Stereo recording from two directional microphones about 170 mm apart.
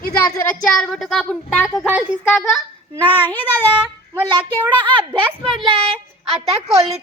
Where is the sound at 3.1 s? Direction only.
10° left (ahead or behind).